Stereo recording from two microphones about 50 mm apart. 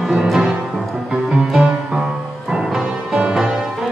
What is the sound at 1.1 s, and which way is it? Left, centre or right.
Music, centre.